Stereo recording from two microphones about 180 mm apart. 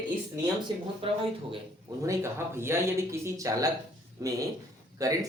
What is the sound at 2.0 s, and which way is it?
Speech, 15° right (ahead or behind).